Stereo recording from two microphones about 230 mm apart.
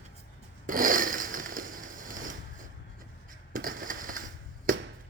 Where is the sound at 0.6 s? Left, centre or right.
Right.